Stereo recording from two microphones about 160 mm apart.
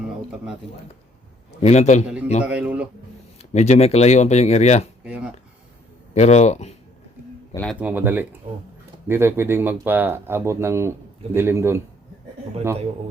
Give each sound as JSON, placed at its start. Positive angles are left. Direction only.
{"t": 1.6, "sound": "speech", "side_deg": 45}
{"t": 2.4, "sound": "speech", "side_deg": -10}
{"t": 3.5, "sound": "speech", "side_deg": 45}
{"t": 5.0, "sound": "speech", "side_deg": -5}
{"t": 6.1, "sound": "speech", "side_deg": 45}
{"t": 7.5, "sound": "a man's voice", "side_deg": 5}
{"t": 7.8, "sound": "speech", "side_deg": -10}